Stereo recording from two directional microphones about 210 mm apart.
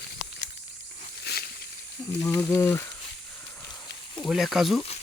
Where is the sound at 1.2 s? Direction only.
50° left (ahead or behind).